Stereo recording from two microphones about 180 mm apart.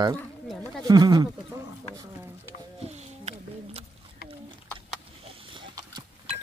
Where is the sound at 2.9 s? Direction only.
35° right (ahead or behind).